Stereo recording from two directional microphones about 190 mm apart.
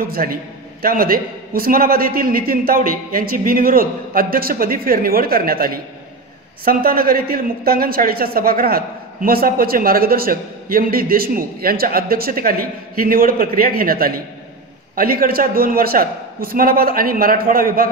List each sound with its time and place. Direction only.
0.0 s a woman's voice: 50° right (ahead or behind)